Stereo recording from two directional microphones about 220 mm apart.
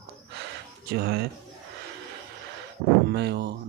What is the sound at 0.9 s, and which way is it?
Speech, 45° right (ahead or behind).